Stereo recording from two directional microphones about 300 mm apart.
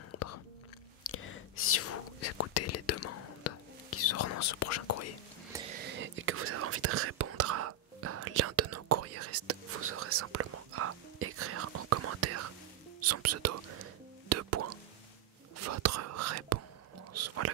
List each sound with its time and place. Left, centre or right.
0.1 s chewing: left
1.1 s whispering: left
5.8 s whispering: right
17.1 s chewing: right